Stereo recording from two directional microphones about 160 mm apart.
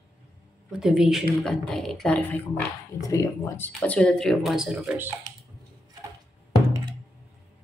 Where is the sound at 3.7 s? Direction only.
5° left (ahead or behind).